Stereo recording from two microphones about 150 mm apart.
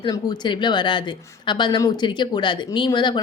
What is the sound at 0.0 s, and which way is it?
A woman's voice, 30° left (ahead or behind).